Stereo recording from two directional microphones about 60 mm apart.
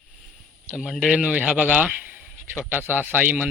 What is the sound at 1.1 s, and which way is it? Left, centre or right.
A man's voice, right.